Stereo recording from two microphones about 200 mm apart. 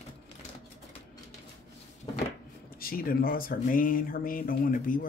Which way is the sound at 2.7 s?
45° left (ahead or behind).